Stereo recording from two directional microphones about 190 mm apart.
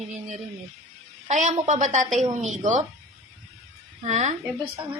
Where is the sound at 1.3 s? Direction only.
40° right (ahead or behind).